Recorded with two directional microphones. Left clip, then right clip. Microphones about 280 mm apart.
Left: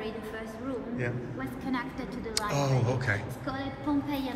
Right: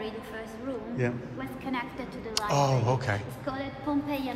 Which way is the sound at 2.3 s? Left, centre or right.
Centre.